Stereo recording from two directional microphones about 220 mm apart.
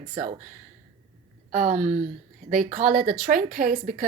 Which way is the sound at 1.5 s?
35° right (ahead or behind).